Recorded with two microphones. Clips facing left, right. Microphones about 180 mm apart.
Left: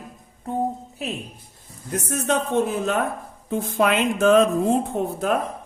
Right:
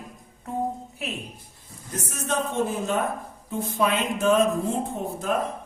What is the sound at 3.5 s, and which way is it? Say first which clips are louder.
Speech: left 4 dB; 75° left (ahead or behind).